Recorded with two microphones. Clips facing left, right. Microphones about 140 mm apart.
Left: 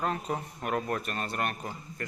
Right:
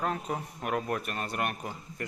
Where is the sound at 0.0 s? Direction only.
5° right (ahead or behind).